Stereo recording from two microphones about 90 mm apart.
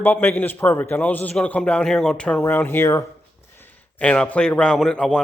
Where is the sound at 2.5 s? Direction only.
25° left (ahead or behind).